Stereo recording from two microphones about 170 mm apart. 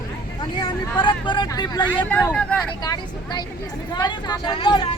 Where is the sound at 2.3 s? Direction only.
5° left (ahead or behind).